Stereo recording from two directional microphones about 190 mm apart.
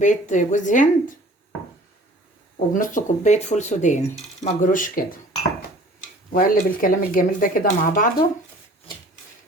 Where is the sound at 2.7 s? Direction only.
45° left (ahead or behind).